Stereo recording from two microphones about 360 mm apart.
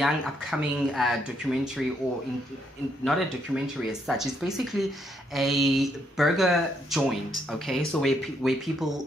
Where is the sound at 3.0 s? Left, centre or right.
Centre.